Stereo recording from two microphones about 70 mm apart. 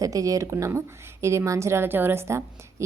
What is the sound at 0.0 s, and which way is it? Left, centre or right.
Speech, right.